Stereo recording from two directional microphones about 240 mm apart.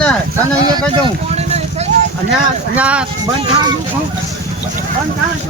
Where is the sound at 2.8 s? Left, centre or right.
Centre.